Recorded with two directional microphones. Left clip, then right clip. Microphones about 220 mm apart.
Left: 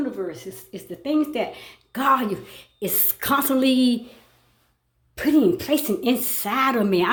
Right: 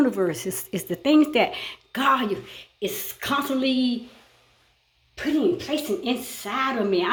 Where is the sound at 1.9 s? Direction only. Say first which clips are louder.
Left 1 dB; 10° left (ahead or behind); by 4.0 s 45° left (ahead or behind).